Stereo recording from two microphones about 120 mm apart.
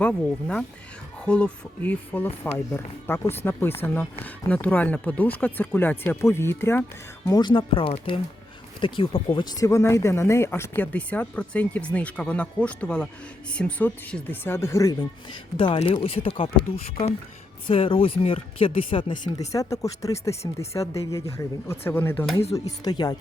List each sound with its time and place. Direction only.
0.0 s speech: 5° left (ahead or behind)
7.3 s speech: 35° left (ahead or behind)
15.5 s speech: 50° left (ahead or behind); by 22.1 s 20° left (ahead or behind)
22.5 s speech: 30° left (ahead or behind)